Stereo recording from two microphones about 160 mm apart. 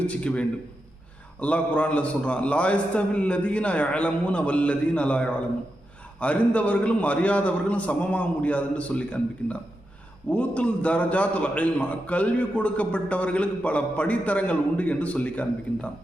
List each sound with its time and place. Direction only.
0.1 s a man's voice: 10° left (ahead or behind)
10.2 s a man's voice: 10° left (ahead or behind)